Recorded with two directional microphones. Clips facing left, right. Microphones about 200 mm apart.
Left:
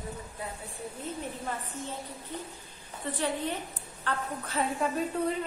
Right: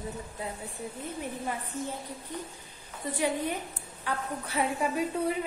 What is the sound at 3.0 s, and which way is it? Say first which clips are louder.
A woman's voice: right 2 dB; 10° right (ahead or behind).